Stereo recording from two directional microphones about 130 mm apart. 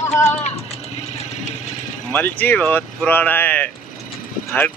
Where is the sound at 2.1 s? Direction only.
15° left (ahead or behind).